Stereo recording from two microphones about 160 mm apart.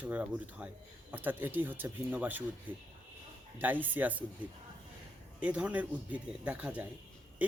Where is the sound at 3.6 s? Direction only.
10° right (ahead or behind).